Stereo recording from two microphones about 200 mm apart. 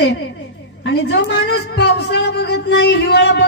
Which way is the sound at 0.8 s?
60° left (ahead or behind).